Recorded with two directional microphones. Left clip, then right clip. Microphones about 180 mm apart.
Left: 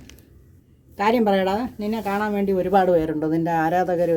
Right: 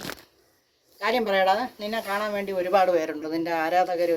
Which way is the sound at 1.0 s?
15° left (ahead or behind).